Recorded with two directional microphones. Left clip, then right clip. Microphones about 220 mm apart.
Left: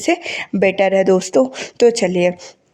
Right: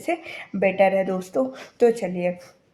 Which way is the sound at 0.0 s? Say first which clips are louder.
Left 9 dB; 40° left (ahead or behind).